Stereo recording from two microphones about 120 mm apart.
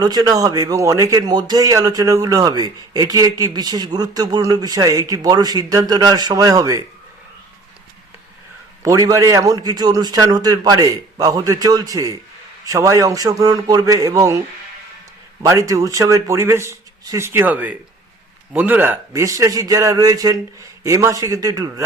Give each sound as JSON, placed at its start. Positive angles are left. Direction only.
{"t": 0.0, "sound": "a man's voice", "side_deg": -35}
{"t": 8.8, "sound": "a man's voice", "side_deg": -30}
{"t": 15.4, "sound": "a man's voice", "side_deg": -25}